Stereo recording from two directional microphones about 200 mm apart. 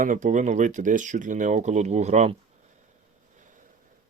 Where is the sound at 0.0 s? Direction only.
40° right (ahead or behind).